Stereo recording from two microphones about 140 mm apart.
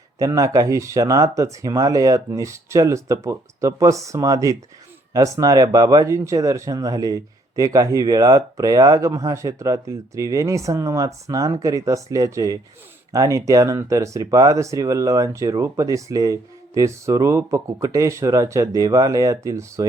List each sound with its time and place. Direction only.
0.2 s speech: 25° right (ahead or behind)